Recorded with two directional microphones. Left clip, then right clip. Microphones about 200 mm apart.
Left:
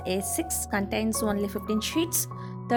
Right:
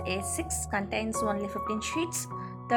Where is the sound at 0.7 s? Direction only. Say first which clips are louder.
Left 2 dB; 55° left (ahead or behind).